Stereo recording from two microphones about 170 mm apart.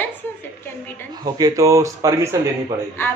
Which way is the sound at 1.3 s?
20° right (ahead or behind).